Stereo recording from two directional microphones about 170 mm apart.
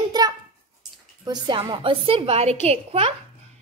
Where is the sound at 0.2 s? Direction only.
25° right (ahead or behind).